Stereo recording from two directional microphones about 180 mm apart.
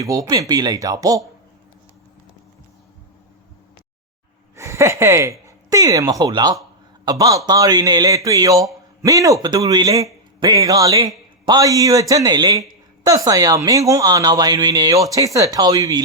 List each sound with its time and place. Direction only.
0.0 s a woman's voice: 20° right (ahead or behind)
4.5 s a woman's voice: 15° right (ahead or behind)